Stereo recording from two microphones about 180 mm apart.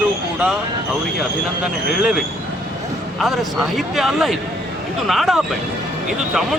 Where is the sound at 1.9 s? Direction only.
Centre (ahead or behind).